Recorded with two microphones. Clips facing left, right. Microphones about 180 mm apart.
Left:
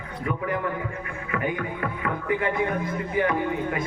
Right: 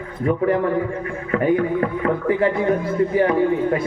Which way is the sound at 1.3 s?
35° right (ahead or behind).